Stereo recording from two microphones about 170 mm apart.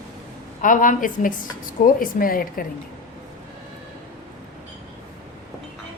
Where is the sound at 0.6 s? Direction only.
50° left (ahead or behind).